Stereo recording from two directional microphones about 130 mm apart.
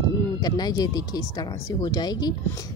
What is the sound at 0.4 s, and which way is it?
A woman's voice, 30° left (ahead or behind).